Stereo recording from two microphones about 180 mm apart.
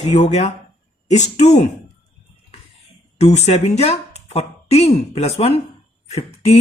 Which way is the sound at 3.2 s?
40° left (ahead or behind).